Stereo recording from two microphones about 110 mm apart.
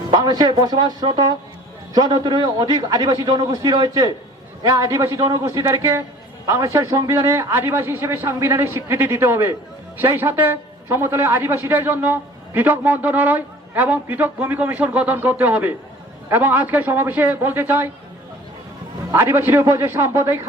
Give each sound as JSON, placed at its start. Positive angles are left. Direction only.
{"t": 0.1, "sound": "a man's voice", "side_deg": -35}
{"t": 19.1, "sound": "a man's voice", "side_deg": -20}